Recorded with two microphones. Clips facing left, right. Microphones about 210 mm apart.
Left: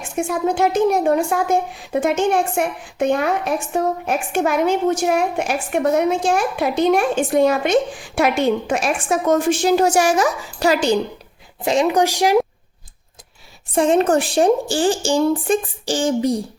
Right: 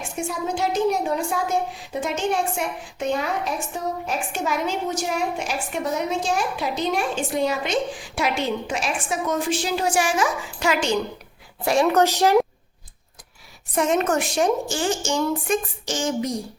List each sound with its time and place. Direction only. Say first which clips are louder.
0.2 s a woman's voice: left 7 dB; 55° left (ahead or behind); by 10.9 s 35° left (ahead or behind)
11.6 s speech: left 2 dB; 20° left (ahead or behind)
13.7 s a woman's voice: left 6 dB; 30° left (ahead or behind)